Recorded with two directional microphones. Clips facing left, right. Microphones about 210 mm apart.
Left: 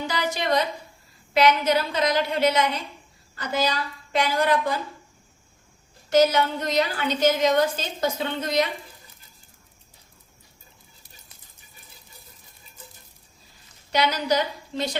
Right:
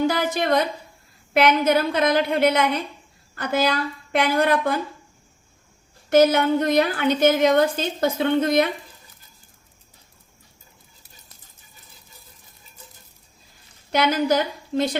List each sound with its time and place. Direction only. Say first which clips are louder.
0.1 s a sound: right 3 dB; 55° right (ahead or behind)
1.3 s a woman's voice: right 2 dB; 55° right (ahead or behind)
6.1 s a woman's voice: right 3 dB; 55° right (ahead or behind)
13.9 s a woman's voice: right 3 dB; 50° right (ahead or behind)